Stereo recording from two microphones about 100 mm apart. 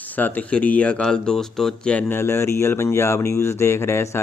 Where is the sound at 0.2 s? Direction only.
15° left (ahead or behind).